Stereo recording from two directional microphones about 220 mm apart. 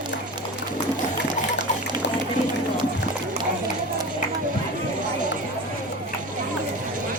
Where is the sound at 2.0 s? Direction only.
55° left (ahead or behind).